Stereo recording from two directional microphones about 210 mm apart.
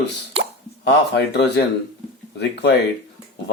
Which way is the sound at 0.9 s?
55° left (ahead or behind).